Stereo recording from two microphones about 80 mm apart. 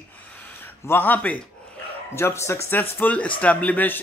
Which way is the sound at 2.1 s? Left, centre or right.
Left.